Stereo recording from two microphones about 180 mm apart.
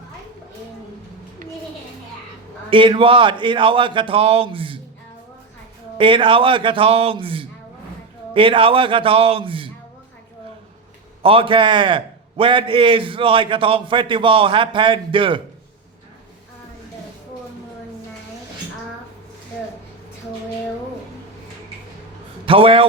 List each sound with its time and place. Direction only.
2.6 s a man's voice: 30° right (ahead or behind)
6.0 s a man's voice: 30° right (ahead or behind)
11.2 s a man's voice: 30° right (ahead or behind)
22.4 s a man's voice: 30° right (ahead or behind)